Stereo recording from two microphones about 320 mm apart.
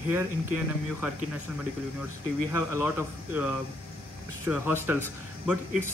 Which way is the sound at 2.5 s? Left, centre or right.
Centre.